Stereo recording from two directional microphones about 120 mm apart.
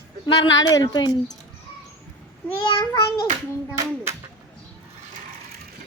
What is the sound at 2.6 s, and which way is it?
Speech, 40° left (ahead or behind).